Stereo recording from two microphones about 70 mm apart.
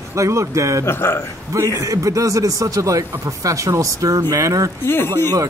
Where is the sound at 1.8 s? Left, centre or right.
Right.